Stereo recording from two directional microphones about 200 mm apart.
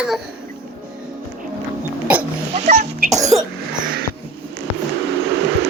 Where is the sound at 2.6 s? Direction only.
35° right (ahead or behind).